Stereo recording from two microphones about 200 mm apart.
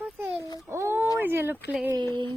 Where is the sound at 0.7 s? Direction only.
10° right (ahead or behind).